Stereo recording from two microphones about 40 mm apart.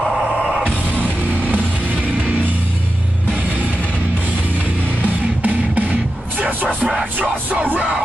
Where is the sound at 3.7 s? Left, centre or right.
Left.